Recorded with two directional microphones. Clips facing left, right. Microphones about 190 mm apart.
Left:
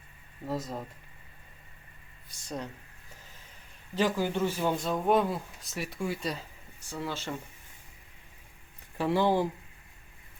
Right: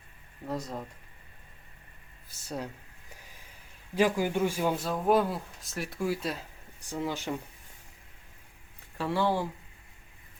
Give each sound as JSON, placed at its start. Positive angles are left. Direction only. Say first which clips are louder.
{"t": 0.4, "sound": "speech", "louder": "left 1 dB", "side_deg": 0}
{"t": 2.3, "sound": "speech", "louder": "right 1 dB", "side_deg": -10}
{"t": 3.2, "sound": "a sound", "louder": "even", "side_deg": -10}
{"t": 3.9, "sound": "speech", "louder": "right 2 dB", "side_deg": -10}
{"t": 6.7, "sound": "speech", "louder": "right 3 dB", "side_deg": -15}
{"t": 9.0, "sound": "speech", "louder": "left 3 dB", "side_deg": 15}